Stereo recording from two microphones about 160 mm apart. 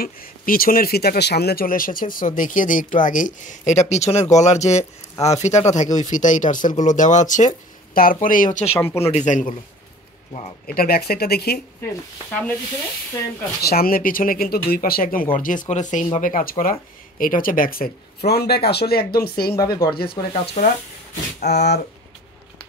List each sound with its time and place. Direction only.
0.0 s speech: 65° left (ahead or behind)
8.7 s speech: 15° left (ahead or behind)
9.1 s speech: 50° left (ahead or behind)
10.7 s speech: 70° left (ahead or behind)
13.6 s speech: 75° left (ahead or behind)
19.5 s speech: 20° left (ahead or behind)
20.0 s speech: 75° left (ahead or behind)
21.5 s speech: 90° left